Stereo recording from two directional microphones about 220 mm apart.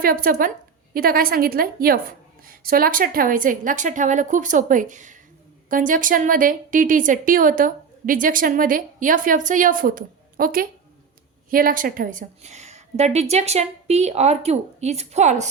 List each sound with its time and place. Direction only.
0.0 s a woman's voice: 40° right (ahead or behind)